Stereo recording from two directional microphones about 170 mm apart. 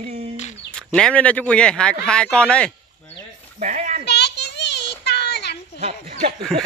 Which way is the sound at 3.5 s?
45° right (ahead or behind).